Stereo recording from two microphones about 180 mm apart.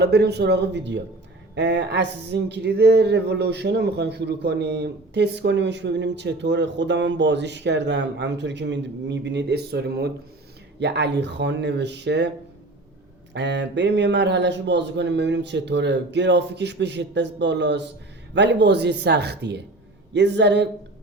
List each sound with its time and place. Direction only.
0.0 s speech: 65° right (ahead or behind)
13.3 s speech: 75° right (ahead or behind)